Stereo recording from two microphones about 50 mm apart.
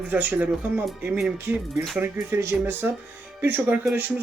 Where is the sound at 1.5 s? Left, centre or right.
Right.